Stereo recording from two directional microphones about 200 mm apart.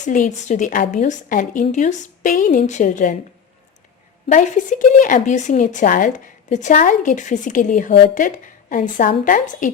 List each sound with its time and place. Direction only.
0.0 s a woman's voice: 40° left (ahead or behind)
4.3 s a woman's voice: 40° left (ahead or behind)